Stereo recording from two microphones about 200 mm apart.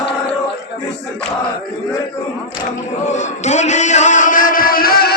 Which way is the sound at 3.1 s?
35° left (ahead or behind).